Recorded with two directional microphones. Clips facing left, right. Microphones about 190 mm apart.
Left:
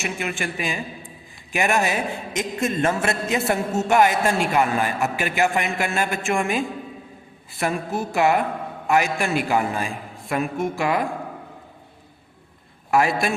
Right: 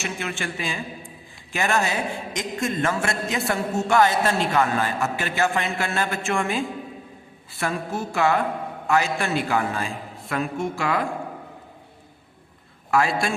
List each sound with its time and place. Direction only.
0.0 s a woman's voice: 15° left (ahead or behind)
12.9 s a woman's voice: 20° left (ahead or behind)